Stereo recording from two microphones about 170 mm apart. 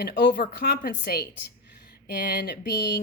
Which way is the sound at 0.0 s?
65° left (ahead or behind).